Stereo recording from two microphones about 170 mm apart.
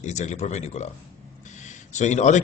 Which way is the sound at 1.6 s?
45° left (ahead or behind).